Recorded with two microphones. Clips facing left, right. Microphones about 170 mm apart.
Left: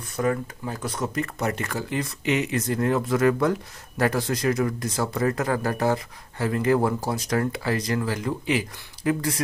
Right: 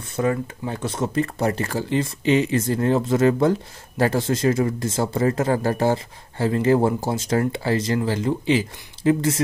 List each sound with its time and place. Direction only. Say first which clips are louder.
0.1 s speech: right 2 dB; 25° right (ahead or behind)